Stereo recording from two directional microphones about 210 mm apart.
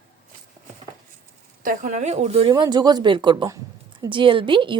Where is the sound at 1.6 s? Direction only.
40° right (ahead or behind); by 4.8 s 25° right (ahead or behind).